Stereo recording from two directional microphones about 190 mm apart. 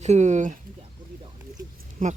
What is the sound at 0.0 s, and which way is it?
Speech, 35° right (ahead or behind).